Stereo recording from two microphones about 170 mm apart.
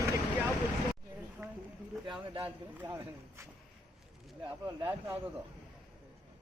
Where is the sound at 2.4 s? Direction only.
15° right (ahead or behind).